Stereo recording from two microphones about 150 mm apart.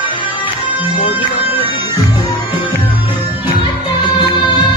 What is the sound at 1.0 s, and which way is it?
Music, 40° left (ahead or behind).